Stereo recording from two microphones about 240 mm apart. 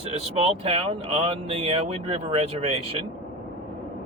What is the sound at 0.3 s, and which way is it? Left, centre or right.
Speech, right.